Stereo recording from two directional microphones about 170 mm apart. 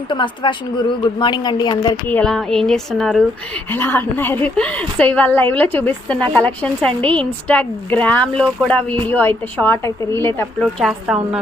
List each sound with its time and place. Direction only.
0.1 s a woman's voice: 30° left (ahead or behind)
2.0 s speech: 5° left (ahead or behind)
3.7 s a woman's voice: 10° left (ahead or behind)
10.6 s speech: 5° right (ahead or behind)